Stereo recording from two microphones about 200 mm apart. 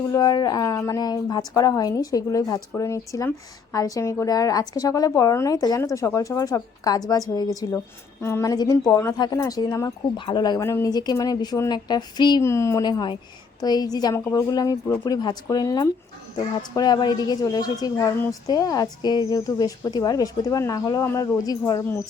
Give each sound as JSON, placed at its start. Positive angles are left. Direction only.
{"t": 0.1, "sound": "a woman's voice", "side_deg": 20}